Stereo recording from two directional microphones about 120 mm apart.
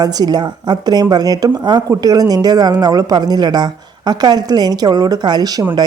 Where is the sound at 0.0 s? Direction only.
35° right (ahead or behind).